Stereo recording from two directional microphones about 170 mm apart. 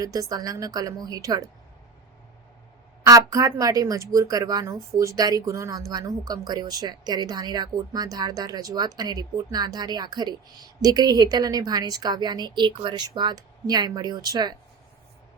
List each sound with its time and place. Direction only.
0.0 s speech: 20° right (ahead or behind)
3.0 s speech: 20° right (ahead or behind)